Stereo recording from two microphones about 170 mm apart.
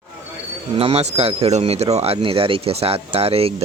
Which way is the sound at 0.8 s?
35° right (ahead or behind).